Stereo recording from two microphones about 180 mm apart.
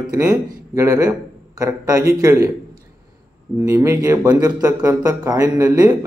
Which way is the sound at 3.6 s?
15° right (ahead or behind).